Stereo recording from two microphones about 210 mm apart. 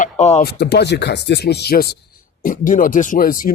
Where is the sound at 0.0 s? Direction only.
30° left (ahead or behind).